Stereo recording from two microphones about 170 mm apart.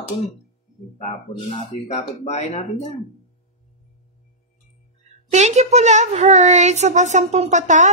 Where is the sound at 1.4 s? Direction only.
35° left (ahead or behind).